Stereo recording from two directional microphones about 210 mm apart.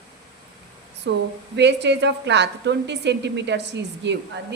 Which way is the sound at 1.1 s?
55° right (ahead or behind).